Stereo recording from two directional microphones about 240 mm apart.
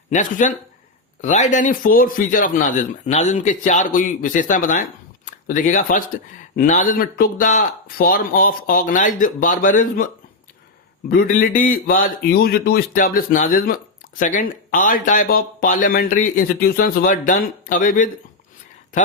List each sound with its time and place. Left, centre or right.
0.1 s speech: left
11.2 s speech: left